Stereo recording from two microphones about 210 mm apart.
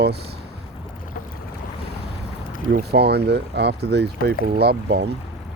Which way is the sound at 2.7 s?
50° right (ahead or behind).